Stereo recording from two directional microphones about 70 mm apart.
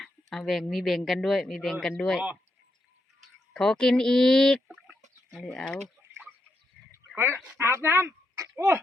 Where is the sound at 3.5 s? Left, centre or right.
Centre.